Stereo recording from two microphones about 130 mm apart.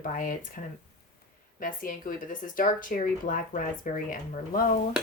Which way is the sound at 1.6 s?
90° left.